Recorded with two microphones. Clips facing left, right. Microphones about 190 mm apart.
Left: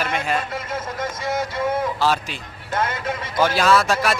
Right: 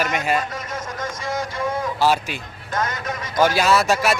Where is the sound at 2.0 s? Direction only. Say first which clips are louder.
Right 2 dB; 10° right (ahead or behind).